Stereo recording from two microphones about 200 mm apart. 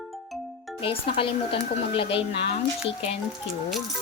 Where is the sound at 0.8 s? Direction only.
30° left (ahead or behind).